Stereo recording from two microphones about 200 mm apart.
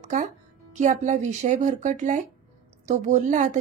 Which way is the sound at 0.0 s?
40° right (ahead or behind).